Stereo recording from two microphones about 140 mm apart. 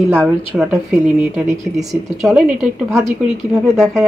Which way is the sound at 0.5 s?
5° right (ahead or behind).